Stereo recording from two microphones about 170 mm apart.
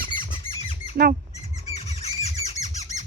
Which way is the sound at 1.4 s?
40° left (ahead or behind).